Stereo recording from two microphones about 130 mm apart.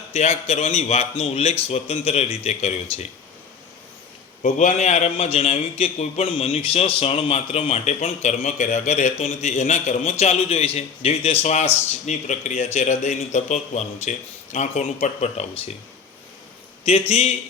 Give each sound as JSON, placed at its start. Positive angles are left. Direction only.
{"t": 0.1, "sound": "speech", "side_deg": 60}
{"t": 4.4, "sound": "speech", "side_deg": 75}
{"t": 12.0, "sound": "speech", "side_deg": 65}
{"t": 16.9, "sound": "speech", "side_deg": 55}